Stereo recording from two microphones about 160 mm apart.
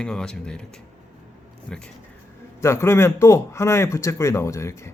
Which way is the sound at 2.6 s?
15° left (ahead or behind).